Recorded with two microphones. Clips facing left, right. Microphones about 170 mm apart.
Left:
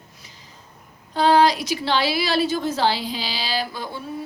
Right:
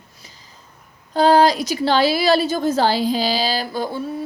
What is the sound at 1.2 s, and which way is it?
A woman's voice, 40° right (ahead or behind).